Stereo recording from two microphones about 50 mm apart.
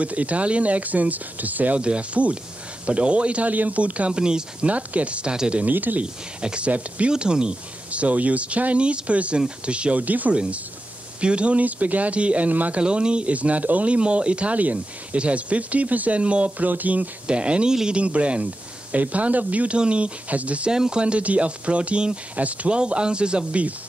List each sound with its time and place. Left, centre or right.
0.0 s speech: right
1.8 s speech: right
4.2 s speech: centre
5.6 s speech: right
6.4 s speech: centre
10.3 s speech: right
12.8 s speech: centre
17.3 s speech: right
20.7 s speech: centre